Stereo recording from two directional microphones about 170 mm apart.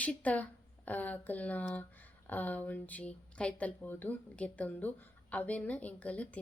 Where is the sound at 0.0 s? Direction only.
10° left (ahead or behind).